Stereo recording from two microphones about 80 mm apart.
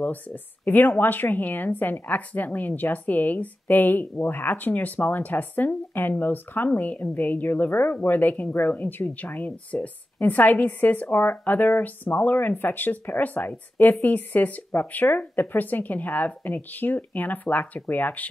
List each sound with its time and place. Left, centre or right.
0.0 s a woman's voice: left